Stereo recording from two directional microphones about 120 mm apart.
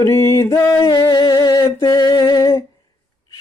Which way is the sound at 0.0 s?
20° left (ahead or behind).